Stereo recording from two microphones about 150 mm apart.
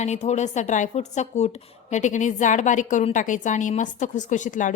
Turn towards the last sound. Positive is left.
turn(degrees=55)  # may be behind; listen again after turning